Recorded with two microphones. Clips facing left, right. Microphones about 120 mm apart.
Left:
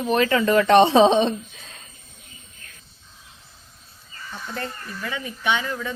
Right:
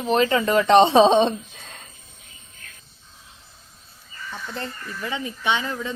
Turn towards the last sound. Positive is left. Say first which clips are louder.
# even
turn(degrees=-25)  # may be behind; listen again after turning